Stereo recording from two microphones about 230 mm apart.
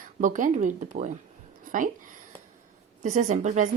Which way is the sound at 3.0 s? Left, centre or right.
Right.